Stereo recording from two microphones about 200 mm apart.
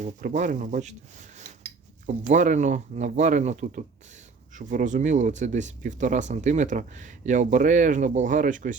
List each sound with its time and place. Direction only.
0.0 s speech: 40° right (ahead or behind)
2.0 s speech: 40° right (ahead or behind)